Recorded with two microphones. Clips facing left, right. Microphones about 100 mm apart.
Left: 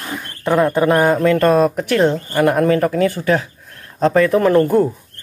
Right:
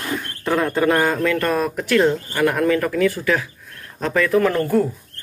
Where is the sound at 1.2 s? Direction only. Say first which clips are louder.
Left 7 dB; 30° left (ahead or behind).